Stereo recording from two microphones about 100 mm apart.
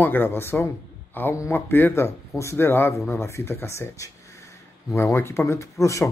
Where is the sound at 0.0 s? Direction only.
20° left (ahead or behind).